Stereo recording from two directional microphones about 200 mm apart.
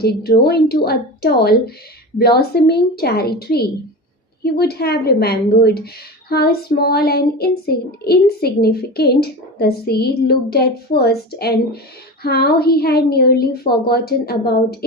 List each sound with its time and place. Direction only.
0.0 s a woman's voice: 50° left (ahead or behind)